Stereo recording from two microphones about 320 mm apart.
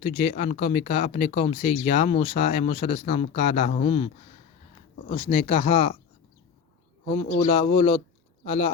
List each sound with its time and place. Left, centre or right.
0.0 s speech: left
7.3 s speech: centre